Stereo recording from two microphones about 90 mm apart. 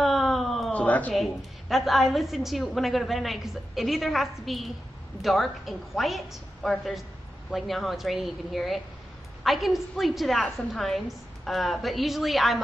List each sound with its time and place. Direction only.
0.0 s a sound: centre (ahead or behind)
0.7 s a woman's voice: 15° left (ahead or behind)
1.1 s a woman's voice: centre (ahead or behind)